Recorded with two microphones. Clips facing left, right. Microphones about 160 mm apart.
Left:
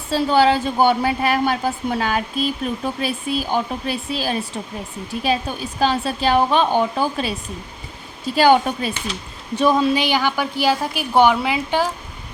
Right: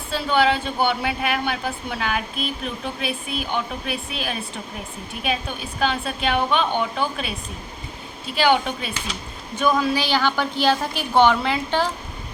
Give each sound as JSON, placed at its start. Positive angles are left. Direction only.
{"t": 0.1, "sound": "a woman's voice", "side_deg": 35}
{"t": 8.4, "sound": "a woman's voice", "side_deg": 40}
{"t": 9.6, "sound": "a woman's voice", "side_deg": 30}